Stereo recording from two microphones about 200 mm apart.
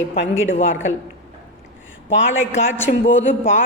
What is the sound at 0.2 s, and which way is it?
Speech, 70° left (ahead or behind).